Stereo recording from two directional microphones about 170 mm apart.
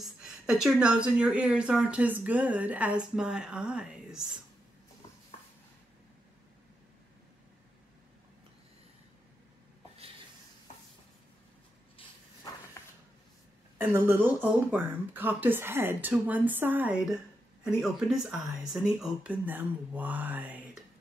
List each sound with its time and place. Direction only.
0.0 s speech: 5° right (ahead or behind)
12.8 s a sound: 15° left (ahead or behind)
13.7 s speech: 10° right (ahead or behind)